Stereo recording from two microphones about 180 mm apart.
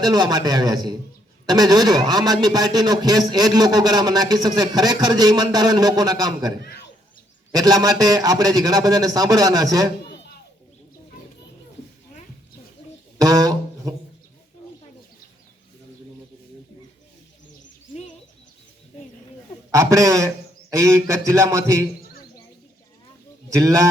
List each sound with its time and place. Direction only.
0.0 s a man's voice: 20° right (ahead or behind)
7.5 s a man's voice: 20° right (ahead or behind)
13.2 s a sound: 20° right (ahead or behind)
19.7 s a man's voice: 20° right (ahead or behind)